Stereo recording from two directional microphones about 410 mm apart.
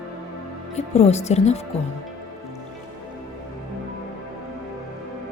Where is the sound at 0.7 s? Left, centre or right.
Centre.